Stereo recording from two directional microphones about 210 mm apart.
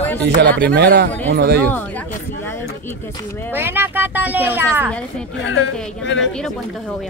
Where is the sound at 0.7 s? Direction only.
50° right (ahead or behind).